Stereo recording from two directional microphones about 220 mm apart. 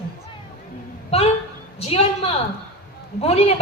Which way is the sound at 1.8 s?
25° left (ahead or behind).